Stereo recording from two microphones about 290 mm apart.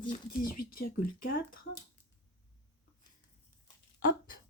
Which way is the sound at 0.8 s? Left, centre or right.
Left.